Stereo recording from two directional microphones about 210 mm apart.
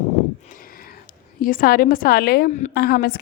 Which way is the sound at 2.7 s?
50° left (ahead or behind).